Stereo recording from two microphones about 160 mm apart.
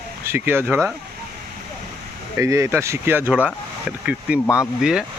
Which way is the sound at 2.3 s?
20° right (ahead or behind).